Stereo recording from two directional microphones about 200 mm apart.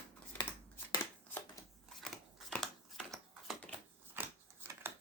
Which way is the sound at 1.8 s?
Centre (ahead or behind).